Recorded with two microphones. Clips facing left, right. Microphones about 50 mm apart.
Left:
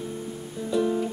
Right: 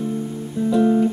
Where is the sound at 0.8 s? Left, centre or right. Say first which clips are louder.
Right 9 dB; centre.